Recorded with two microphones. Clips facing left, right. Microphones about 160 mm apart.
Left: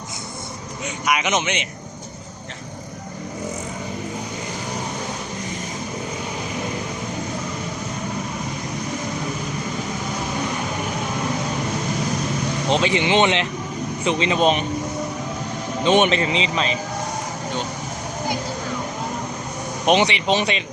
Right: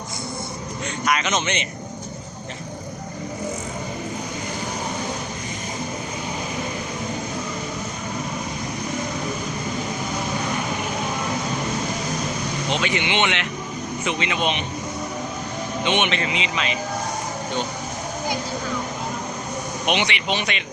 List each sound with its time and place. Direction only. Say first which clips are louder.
1.0 s speech: left 1 dB; 15° left (ahead or behind)
12.6 s a man's voice: left 5 dB; 30° left (ahead or behind)
15.8 s a man's voice: left 6 dB; 40° left (ahead or behind)
19.8 s a man's voice: left 7 dB; 35° left (ahead or behind)